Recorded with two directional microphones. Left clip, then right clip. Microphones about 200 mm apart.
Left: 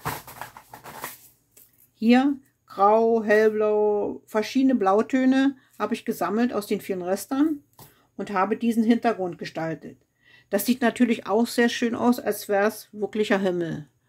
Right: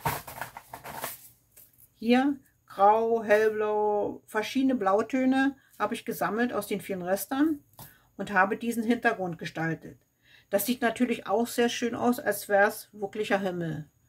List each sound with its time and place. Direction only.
2.0 s speech: 35° left (ahead or behind)